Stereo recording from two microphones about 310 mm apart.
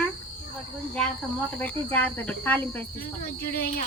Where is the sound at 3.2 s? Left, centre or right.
Left.